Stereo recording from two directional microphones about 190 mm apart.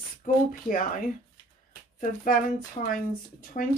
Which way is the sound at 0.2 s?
45° left (ahead or behind).